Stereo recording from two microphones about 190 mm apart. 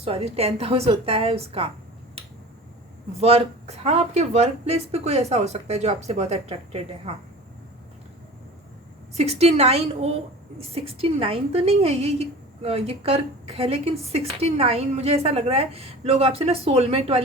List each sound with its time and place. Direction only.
0.0 s a woman's voice: 30° right (ahead or behind)
3.2 s a woman's voice: 30° right (ahead or behind)
9.1 s a woman's voice: 35° right (ahead or behind)